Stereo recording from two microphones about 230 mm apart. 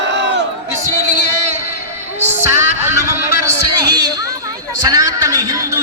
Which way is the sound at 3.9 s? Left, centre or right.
Centre.